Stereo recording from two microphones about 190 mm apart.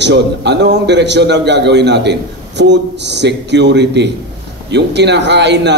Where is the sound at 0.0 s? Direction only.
65° right (ahead or behind).